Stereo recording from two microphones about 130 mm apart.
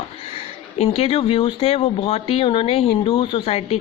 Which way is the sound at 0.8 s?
50° left (ahead or behind).